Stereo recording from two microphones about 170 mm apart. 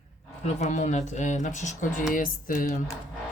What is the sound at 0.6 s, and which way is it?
Speech, 45° left (ahead or behind).